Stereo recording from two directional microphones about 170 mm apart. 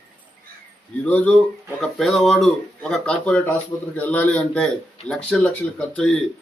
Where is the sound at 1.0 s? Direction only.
10° left (ahead or behind).